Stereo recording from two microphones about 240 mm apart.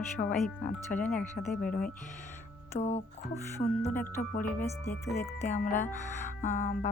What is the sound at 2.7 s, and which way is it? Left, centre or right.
Speech, left.